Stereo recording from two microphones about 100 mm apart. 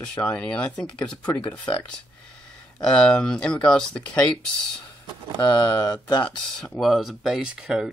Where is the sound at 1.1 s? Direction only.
45° left (ahead or behind).